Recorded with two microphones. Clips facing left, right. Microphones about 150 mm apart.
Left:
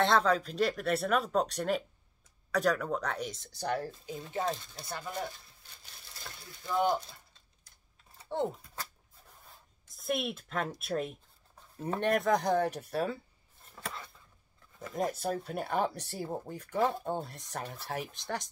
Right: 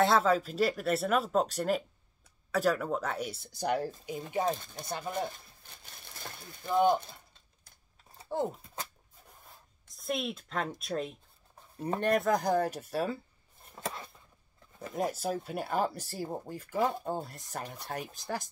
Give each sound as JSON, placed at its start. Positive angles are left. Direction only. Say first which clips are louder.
{"t": 0.0, "sound": "speech", "louder": "right 1 dB", "side_deg": -5}
{"t": 6.6, "sound": "speech", "louder": "right 3 dB", "side_deg": -20}
{"t": 8.3, "sound": "speech", "louder": "even", "side_deg": 0}
{"t": 9.9, "sound": "speech", "louder": "left 1 dB", "side_deg": 5}
{"t": 13.7, "sound": "a sound", "louder": "right 3 dB", "side_deg": -20}
{"t": 15.0, "sound": "speech", "louder": "even", "side_deg": 0}